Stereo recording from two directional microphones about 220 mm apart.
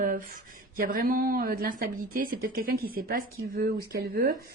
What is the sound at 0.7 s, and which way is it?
Speech, 40° right (ahead or behind).